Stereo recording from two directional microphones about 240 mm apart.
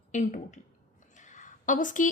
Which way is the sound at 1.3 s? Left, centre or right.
Left.